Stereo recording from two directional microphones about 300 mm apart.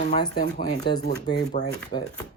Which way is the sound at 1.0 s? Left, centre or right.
Left.